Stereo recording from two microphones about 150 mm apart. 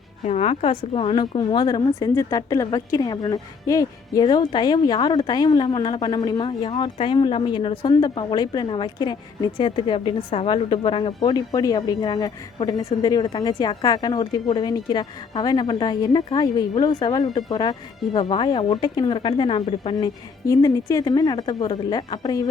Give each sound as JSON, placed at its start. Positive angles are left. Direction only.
{"t": 0.3, "sound": "a woman's voice", "side_deg": 45}